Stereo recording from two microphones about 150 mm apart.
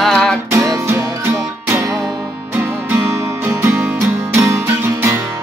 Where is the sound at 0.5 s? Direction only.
20° right (ahead or behind).